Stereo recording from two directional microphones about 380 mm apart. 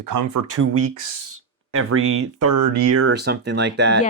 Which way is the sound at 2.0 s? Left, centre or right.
Right.